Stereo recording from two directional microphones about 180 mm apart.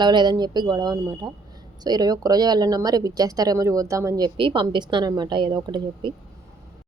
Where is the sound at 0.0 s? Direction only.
25° right (ahead or behind).